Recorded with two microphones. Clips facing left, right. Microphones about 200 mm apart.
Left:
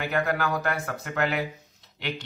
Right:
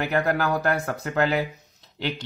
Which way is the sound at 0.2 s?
40° right (ahead or behind).